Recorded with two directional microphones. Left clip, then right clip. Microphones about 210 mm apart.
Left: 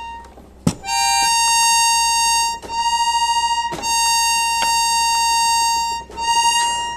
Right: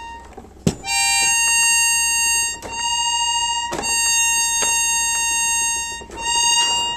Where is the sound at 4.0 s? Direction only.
35° right (ahead or behind).